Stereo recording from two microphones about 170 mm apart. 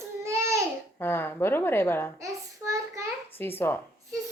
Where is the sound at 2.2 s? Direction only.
20° right (ahead or behind).